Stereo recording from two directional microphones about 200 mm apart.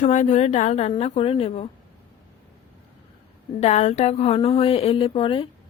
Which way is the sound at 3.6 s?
35° left (ahead or behind).